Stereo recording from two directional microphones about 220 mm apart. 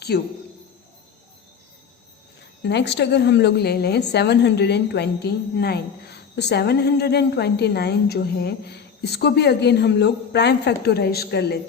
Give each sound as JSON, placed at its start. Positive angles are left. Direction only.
{"t": 0.1, "sound": "a woman's voice", "side_deg": 50}
{"t": 2.6, "sound": "a woman's voice", "side_deg": 50}